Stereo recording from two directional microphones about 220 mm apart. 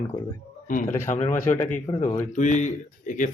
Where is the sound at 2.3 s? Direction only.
35° left (ahead or behind).